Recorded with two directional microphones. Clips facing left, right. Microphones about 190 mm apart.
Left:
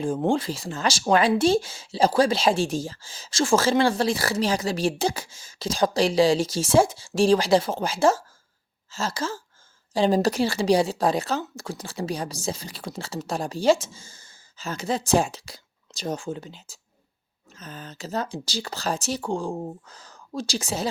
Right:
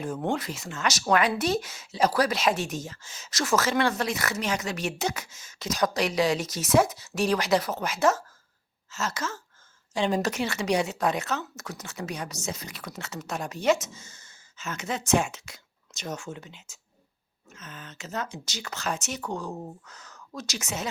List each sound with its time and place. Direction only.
0.0 s a woman's voice: 30° left (ahead or behind)